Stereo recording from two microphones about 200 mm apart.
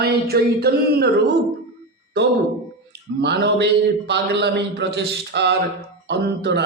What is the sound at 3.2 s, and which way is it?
Speech, 55° right (ahead or behind).